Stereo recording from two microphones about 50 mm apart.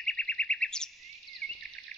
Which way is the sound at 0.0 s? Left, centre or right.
Left.